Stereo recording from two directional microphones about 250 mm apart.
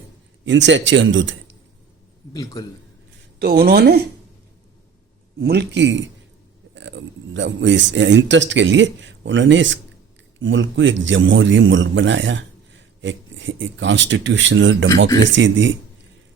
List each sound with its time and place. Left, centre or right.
0.4 s speech: right
2.3 s a man's voice: centre
3.3 s speech: right
5.4 s speech: right